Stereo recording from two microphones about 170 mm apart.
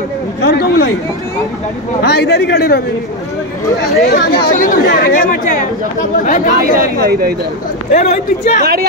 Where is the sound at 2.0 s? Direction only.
75° left (ahead or behind).